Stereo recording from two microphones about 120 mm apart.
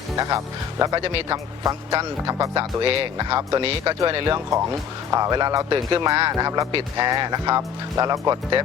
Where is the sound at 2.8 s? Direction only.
50° right (ahead or behind).